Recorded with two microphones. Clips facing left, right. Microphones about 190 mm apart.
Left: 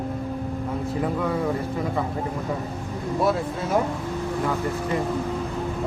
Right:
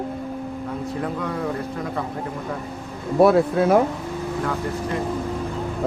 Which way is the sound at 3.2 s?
65° right (ahead or behind).